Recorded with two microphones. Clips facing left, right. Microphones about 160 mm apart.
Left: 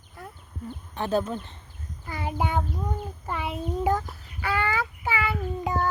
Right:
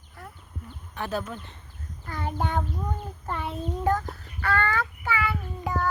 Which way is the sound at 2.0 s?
10° left (ahead or behind).